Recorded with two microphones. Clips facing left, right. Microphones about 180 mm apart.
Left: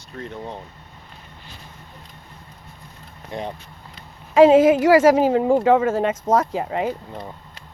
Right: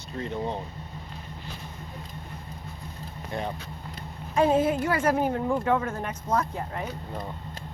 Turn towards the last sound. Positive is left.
turn(degrees=90)